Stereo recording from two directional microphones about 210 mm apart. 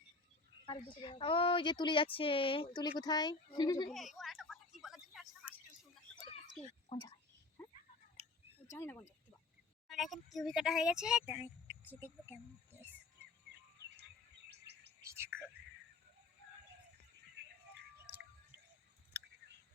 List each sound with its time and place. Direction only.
0.6 s a woman's voice: 25° left (ahead or behind)
3.9 s a sound: centre (ahead or behind)
6.9 s speech: 25° left (ahead or behind)
8.6 s speech: 15° left (ahead or behind)
9.9 s speech: centre (ahead or behind)
14.5 s chirp: 55° right (ahead or behind)
15.0 s whispering: 10° right (ahead or behind)
17.4 s a sound: 55° right (ahead or behind)